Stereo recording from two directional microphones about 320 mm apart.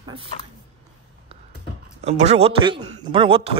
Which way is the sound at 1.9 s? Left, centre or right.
Centre.